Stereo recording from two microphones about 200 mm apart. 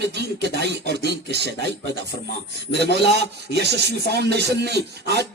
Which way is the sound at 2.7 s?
55° right (ahead or behind).